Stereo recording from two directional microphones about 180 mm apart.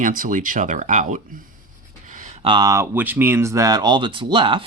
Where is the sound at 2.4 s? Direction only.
25° right (ahead or behind).